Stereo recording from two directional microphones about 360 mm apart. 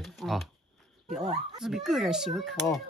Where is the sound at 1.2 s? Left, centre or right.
Centre.